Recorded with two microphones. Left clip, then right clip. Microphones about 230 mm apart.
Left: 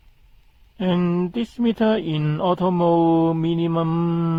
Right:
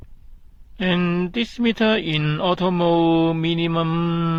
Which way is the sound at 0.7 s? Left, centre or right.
Centre.